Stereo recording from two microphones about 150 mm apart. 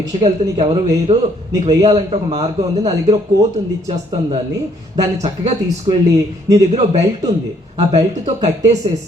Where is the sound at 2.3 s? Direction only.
45° right (ahead or behind).